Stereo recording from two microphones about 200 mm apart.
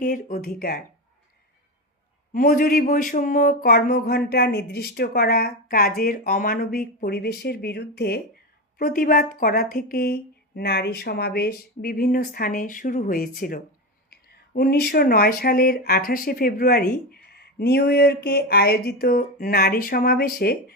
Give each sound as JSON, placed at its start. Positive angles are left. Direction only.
{"t": 0.0, "sound": "speech", "side_deg": 45}
{"t": 2.3, "sound": "speech", "side_deg": 45}